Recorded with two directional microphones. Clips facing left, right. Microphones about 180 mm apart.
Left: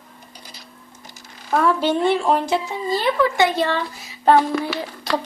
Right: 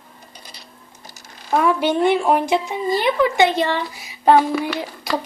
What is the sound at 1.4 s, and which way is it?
Speech, 15° right (ahead or behind).